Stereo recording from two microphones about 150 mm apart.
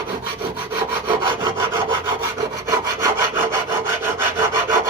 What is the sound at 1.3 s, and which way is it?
Rub, 35° right (ahead or behind).